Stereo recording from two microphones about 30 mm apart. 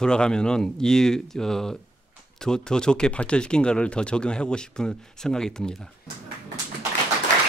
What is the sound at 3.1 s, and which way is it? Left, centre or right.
Speech, left.